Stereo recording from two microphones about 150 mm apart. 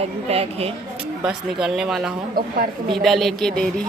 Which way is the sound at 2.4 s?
75° right (ahead or behind).